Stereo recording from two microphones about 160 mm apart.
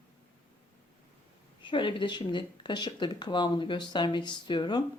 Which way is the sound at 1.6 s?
30° left (ahead or behind).